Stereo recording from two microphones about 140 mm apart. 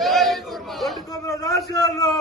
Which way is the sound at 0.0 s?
Centre (ahead or behind).